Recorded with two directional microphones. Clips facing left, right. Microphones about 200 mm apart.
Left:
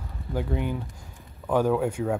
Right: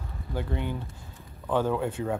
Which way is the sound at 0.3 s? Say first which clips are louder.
Left 3 dB; 10° left (ahead or behind).